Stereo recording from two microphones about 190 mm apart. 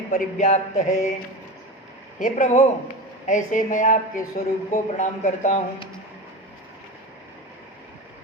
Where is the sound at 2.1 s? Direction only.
40° left (ahead or behind).